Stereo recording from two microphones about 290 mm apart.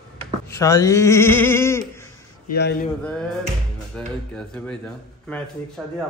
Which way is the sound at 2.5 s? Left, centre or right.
Left.